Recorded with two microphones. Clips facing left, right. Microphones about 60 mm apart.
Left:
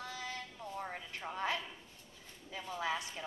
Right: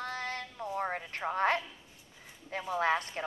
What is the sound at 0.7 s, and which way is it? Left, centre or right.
Speech, right.